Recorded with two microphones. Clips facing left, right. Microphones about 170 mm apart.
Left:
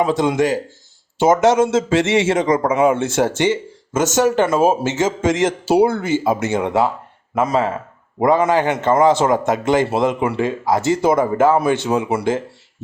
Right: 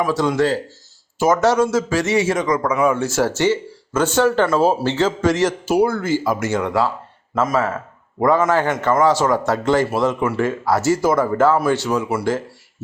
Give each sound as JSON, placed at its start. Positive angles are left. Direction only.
{"t": 0.0, "sound": "a man's voice", "side_deg": 20}